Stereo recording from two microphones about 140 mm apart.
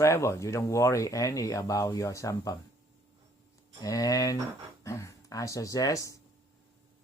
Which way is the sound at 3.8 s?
25° left (ahead or behind).